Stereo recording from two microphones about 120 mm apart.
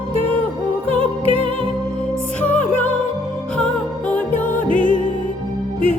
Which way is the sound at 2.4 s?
10° left (ahead or behind).